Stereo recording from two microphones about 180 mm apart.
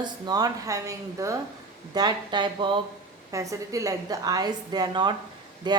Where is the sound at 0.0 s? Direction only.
20° right (ahead or behind).